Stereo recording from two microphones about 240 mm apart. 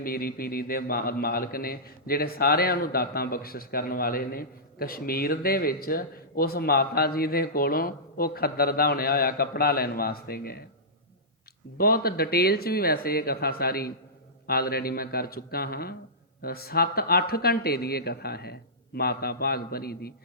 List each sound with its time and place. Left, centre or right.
0.0 s a man's voice: left
11.8 s a man's voice: left